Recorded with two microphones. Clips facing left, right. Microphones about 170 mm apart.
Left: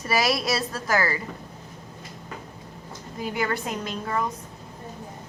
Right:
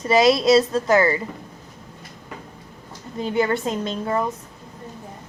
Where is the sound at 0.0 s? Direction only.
20° right (ahead or behind).